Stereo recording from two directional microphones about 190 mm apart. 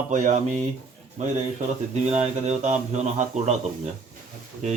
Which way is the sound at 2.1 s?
35° right (ahead or behind).